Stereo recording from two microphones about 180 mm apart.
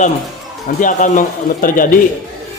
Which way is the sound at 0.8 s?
45° left (ahead or behind).